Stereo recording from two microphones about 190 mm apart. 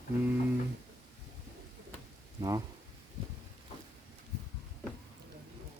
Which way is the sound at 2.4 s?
20° right (ahead or behind).